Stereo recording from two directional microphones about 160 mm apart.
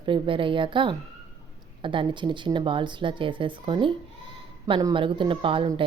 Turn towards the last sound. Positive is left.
turn(degrees=-35)  # may be behind; listen again after turning